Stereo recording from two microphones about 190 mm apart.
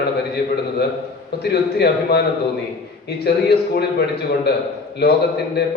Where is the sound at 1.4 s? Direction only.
60° left (ahead or behind).